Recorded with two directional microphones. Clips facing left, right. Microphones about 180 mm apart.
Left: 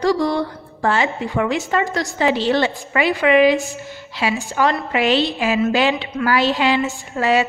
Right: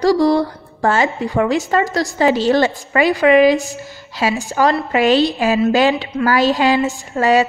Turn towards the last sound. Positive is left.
turn(degrees=-40)  # may be behind; listen again after turning